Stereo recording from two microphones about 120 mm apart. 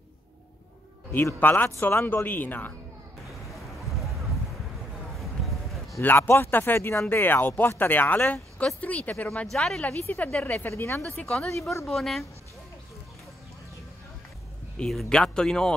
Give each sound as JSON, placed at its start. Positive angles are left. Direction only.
{"t": 1.1, "sound": "speech", "side_deg": 15}
{"t": 5.2, "sound": "a sound", "side_deg": 0}
{"t": 5.9, "sound": "speech", "side_deg": 20}
{"t": 11.1, "sound": "speech", "side_deg": 10}
{"t": 14.8, "sound": "speech", "side_deg": 5}